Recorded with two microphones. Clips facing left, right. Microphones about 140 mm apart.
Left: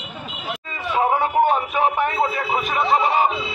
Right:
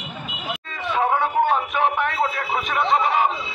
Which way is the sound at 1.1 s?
10° left (ahead or behind).